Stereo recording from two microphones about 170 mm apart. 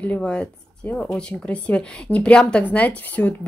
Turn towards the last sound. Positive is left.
turn(degrees=10)  # may be behind; listen again after turning